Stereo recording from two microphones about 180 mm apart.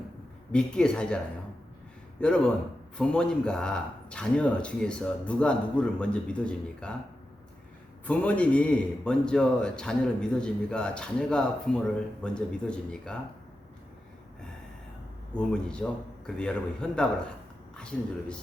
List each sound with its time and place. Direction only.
0.5 s a man's voice: 5° left (ahead or behind)
2.2 s a man's voice: 5° left (ahead or behind)
8.0 s a man's voice: 10° left (ahead or behind)
15.4 s a man's voice: 5° left (ahead or behind)